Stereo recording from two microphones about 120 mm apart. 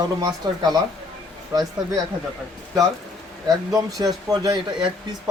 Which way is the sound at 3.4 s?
30° right (ahead or behind).